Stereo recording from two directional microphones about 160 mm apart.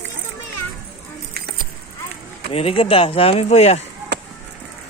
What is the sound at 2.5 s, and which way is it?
Speech, 40° left (ahead or behind).